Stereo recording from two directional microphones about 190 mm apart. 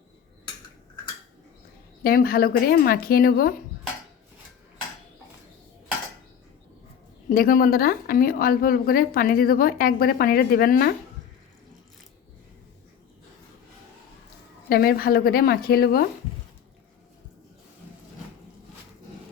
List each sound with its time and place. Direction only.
2.0 s a woman's voice: 50° left (ahead or behind)
7.3 s a woman's voice: 45° left (ahead or behind)
14.7 s a woman's voice: 55° left (ahead or behind)